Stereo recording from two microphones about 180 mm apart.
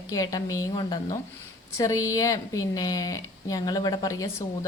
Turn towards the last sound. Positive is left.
turn(degrees=20)  # may be behind; listen again after turning